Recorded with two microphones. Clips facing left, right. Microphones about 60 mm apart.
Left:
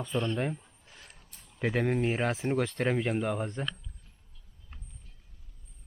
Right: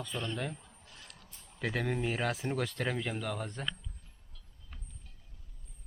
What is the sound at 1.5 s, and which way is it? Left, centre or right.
Speech, centre.